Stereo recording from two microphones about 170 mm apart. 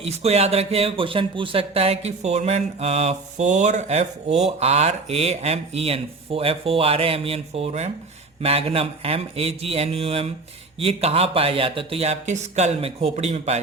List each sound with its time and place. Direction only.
0.0 s a man's voice: 40° right (ahead or behind)